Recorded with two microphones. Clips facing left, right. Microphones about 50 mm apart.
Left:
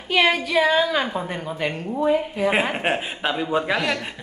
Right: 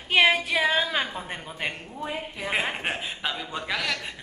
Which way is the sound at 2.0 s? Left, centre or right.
Centre.